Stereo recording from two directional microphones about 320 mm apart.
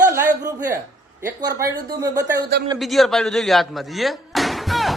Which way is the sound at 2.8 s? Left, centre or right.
Centre.